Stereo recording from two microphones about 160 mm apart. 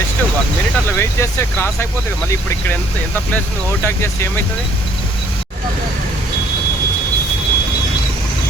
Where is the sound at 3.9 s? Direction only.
15° left (ahead or behind).